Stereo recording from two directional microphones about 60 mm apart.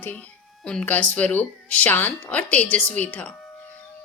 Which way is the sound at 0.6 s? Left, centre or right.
Centre.